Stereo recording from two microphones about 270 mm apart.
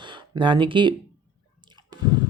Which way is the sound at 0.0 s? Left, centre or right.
Centre.